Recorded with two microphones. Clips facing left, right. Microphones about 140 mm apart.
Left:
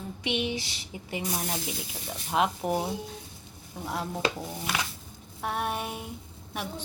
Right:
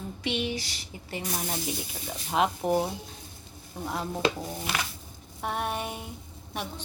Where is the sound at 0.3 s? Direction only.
20° left (ahead or behind).